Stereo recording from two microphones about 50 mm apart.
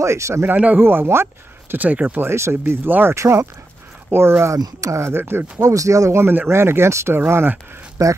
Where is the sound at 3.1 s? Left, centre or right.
Right.